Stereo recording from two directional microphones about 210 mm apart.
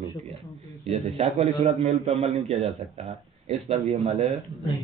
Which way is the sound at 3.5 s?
30° right (ahead or behind).